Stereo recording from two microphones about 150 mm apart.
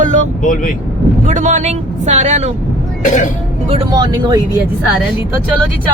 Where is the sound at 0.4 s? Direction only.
65° left (ahead or behind).